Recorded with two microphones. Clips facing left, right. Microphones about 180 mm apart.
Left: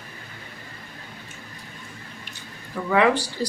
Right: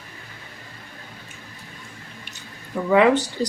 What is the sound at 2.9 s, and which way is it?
Speech, 20° right (ahead or behind).